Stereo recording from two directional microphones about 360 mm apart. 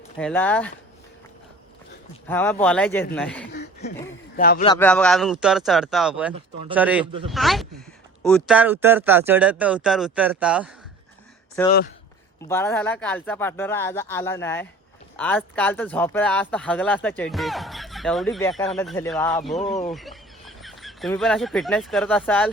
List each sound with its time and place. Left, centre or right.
0.2 s speech: centre
2.2 s speech: centre
3.5 s a sound: left
4.4 s a man's voice: left
4.7 s speech: centre